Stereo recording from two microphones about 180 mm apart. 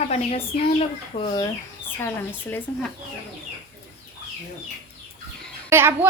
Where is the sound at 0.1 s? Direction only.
35° left (ahead or behind).